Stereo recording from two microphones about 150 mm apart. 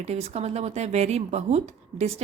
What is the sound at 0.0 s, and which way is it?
Speech, 45° right (ahead or behind).